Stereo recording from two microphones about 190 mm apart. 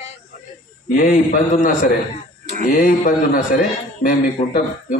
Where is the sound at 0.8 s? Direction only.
45° left (ahead or behind).